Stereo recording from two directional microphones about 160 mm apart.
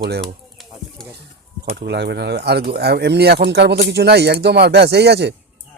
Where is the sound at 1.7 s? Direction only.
90° right.